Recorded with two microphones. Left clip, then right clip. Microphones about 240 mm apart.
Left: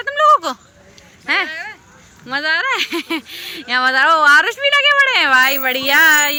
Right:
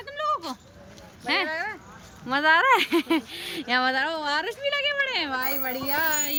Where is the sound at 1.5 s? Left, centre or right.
Centre.